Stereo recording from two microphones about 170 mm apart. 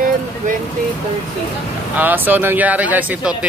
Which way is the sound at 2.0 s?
10° right (ahead or behind).